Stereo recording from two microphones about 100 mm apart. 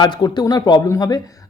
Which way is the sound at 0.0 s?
45° left (ahead or behind).